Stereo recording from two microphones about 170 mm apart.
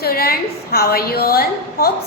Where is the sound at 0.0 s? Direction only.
60° left (ahead or behind).